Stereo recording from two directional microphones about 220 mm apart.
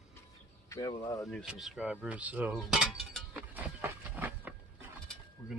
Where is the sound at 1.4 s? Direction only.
Centre (ahead or behind).